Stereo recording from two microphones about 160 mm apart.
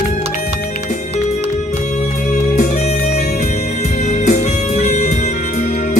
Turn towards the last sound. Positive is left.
turn(degrees=45)  # may be behind; listen again after turning